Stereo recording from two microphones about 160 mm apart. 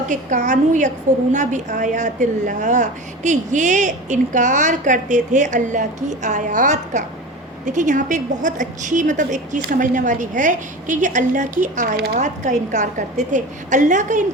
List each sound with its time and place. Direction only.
0.1 s a woman's voice: 50° right (ahead or behind)
11.9 s a woman's voice: 85° right
12.2 s a woman's voice: 50° right (ahead or behind)